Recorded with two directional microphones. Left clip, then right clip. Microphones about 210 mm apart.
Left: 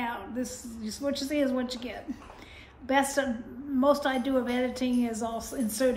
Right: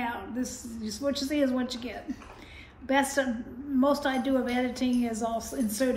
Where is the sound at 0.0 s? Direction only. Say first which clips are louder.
Even; 5° left (ahead or behind).